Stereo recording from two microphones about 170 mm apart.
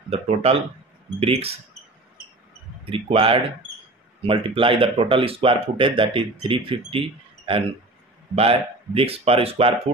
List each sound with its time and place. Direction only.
0.1 s speech: 35° right (ahead or behind)
2.8 s speech: 35° right (ahead or behind)